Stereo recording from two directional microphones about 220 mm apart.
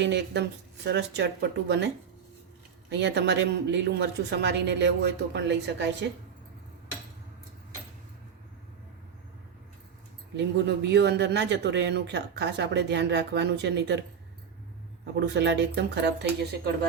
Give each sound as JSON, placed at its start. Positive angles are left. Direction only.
{"t": 0.0, "sound": "speech", "side_deg": -50}
{"t": 2.9, "sound": "speech", "side_deg": -50}
{"t": 10.3, "sound": "speech", "side_deg": -50}
{"t": 15.1, "sound": "speech", "side_deg": -50}